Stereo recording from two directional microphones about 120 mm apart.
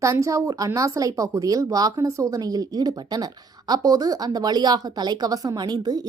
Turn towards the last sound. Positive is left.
turn(degrees=-35)  # may be behind; listen again after turning